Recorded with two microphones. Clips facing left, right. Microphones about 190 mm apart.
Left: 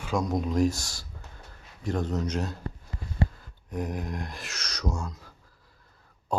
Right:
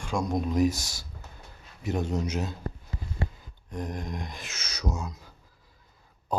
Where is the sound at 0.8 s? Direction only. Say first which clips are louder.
Even; 20° right (ahead or behind).